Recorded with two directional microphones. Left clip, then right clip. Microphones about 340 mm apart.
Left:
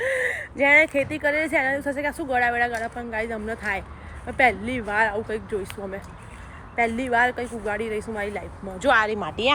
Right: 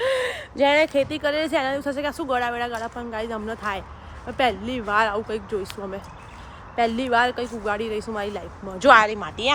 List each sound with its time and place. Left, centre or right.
0.0 s speech: centre